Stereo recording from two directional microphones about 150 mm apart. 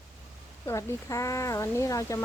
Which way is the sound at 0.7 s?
20° left (ahead or behind).